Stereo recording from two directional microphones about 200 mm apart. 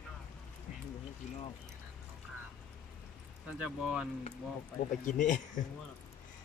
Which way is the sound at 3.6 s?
5° right (ahead or behind).